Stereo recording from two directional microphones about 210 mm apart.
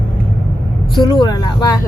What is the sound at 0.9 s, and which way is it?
Speech, 20° left (ahead or behind).